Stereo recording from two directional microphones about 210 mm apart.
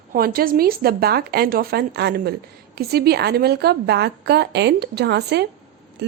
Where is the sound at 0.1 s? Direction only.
45° right (ahead or behind).